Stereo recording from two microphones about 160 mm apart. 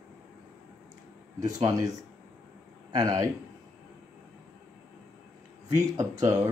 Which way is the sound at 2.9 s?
20° right (ahead or behind).